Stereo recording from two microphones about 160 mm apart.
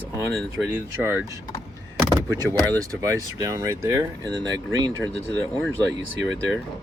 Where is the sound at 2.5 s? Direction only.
20° right (ahead or behind).